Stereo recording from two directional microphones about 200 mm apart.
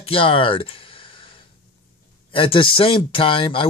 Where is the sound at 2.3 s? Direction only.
25° left (ahead or behind).